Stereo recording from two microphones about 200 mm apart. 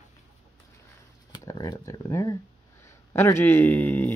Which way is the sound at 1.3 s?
20° left (ahead or behind).